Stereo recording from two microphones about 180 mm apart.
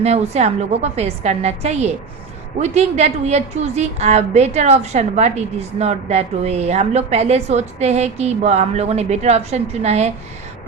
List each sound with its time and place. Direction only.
0.0 s a woman's voice: 35° right (ahead or behind)